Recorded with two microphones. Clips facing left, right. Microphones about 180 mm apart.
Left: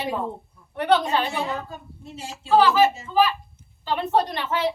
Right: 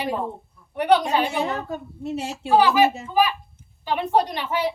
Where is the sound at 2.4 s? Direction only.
15° right (ahead or behind).